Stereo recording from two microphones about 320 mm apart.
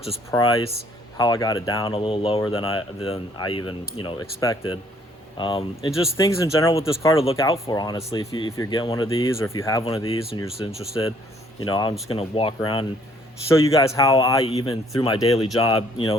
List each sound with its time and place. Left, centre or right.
0.1 s speech: centre
11.6 s speech: centre